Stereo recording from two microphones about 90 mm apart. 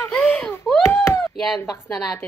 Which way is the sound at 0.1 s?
25° left (ahead or behind).